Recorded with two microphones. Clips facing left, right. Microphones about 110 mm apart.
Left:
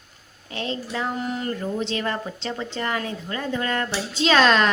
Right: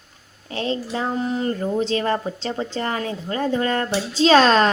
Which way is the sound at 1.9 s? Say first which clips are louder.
Right 5 dB; 35° right (ahead or behind).